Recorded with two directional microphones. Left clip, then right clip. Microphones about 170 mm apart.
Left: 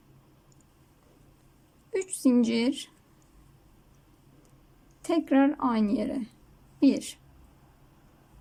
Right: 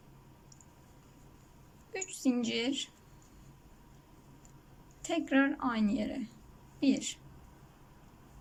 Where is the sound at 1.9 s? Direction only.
30° left (ahead or behind).